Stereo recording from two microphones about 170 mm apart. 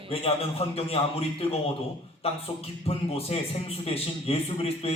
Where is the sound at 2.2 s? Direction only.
35° left (ahead or behind).